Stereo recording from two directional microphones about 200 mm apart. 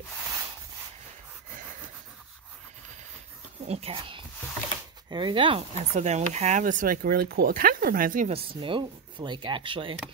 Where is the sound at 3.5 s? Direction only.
30° right (ahead or behind).